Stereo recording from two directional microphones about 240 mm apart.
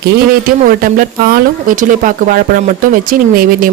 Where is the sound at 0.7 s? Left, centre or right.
Right.